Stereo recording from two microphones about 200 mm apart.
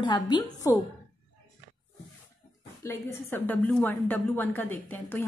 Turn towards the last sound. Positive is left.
turn(degrees=10)  # may be behind; listen again after turning